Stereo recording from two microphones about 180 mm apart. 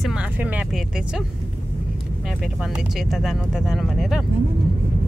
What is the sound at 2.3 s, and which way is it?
Speech, centre (ahead or behind).